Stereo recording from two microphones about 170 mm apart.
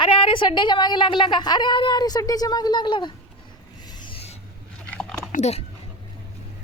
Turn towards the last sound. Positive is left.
turn(degrees=40)  # may be behind; listen again after turning